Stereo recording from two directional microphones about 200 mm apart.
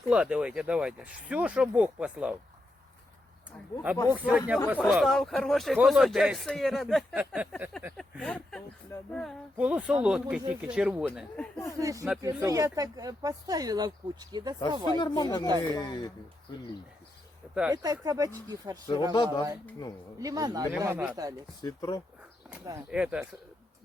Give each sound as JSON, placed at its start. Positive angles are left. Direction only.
{"t": 0.1, "sound": "a man's voice", "side_deg": -5}
{"t": 3.9, "sound": "a man's voice", "side_deg": -5}
{"t": 11.8, "sound": "speech", "side_deg": -15}
{"t": 14.9, "sound": "speech", "side_deg": 20}
{"t": 17.7, "sound": "speech", "side_deg": -15}
{"t": 19.1, "sound": "speech", "side_deg": 20}
{"t": 20.1, "sound": "speech", "side_deg": -20}
{"t": 21.6, "sound": "speech", "side_deg": 20}
{"t": 22.9, "sound": "a man's voice", "side_deg": -5}